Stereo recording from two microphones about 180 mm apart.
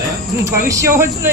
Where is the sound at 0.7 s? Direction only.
15° right (ahead or behind).